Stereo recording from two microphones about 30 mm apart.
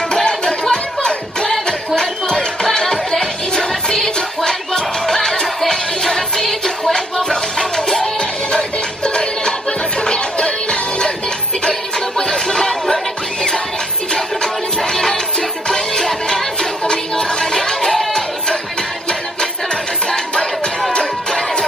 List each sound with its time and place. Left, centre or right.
0.1 s music: left
8.2 s music: left
12.2 s music: left
14.9 s music: centre
16.1 s music: centre
16.8 s music: left
19.7 s music: left